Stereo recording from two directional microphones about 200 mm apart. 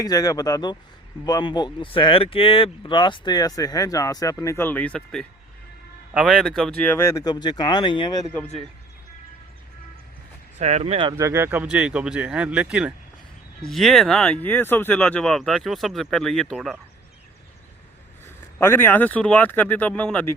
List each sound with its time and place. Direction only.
0.0 s speech: 20° left (ahead or behind)
10.6 s speech: 35° right (ahead or behind)
11.2 s speech: 10° right (ahead or behind)
18.6 s speech: 10° left (ahead or behind)